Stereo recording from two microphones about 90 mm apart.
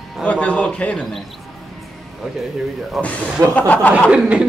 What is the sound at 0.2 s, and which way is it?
Speech, 15° left (ahead or behind).